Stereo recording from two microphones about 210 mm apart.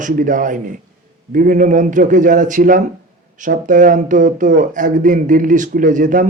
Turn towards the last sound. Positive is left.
turn(degrees=-40)  # may be behind; listen again after turning